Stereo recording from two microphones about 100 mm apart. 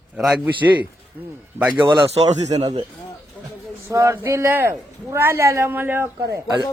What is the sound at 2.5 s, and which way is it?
Speech, 50° right (ahead or behind).